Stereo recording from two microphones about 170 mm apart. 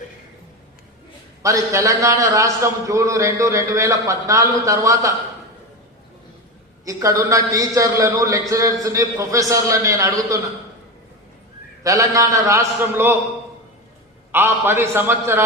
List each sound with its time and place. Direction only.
1.4 s a man's voice: 20° right (ahead or behind)
6.8 s a man's voice: 20° right (ahead or behind)
11.8 s a man's voice: 20° right (ahead or behind)
14.3 s a man's voice: 15° right (ahead or behind)